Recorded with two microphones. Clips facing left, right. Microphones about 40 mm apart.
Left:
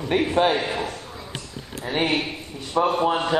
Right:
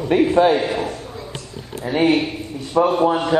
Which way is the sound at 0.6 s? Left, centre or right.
Centre.